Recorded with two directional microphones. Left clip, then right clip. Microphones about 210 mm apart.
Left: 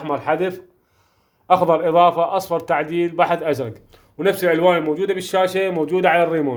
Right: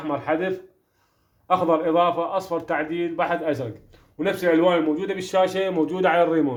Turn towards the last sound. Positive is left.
turn(degrees=35)  # may be behind; listen again after turning